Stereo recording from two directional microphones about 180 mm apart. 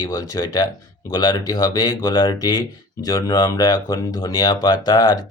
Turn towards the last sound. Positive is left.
turn(degrees=20)  # may be behind; listen again after turning